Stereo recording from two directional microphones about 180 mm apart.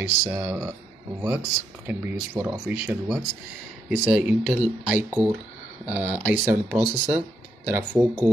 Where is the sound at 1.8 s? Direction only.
10° right (ahead or behind).